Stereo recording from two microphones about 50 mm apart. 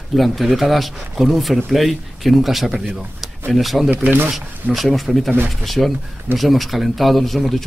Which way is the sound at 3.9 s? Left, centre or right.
Right.